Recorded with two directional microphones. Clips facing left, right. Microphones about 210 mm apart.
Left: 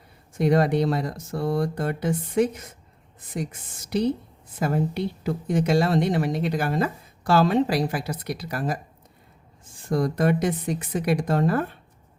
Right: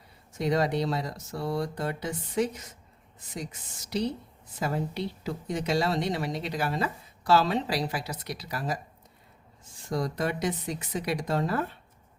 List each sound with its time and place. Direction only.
0.3 s speech: 55° left (ahead or behind)
9.9 s speech: 50° left (ahead or behind)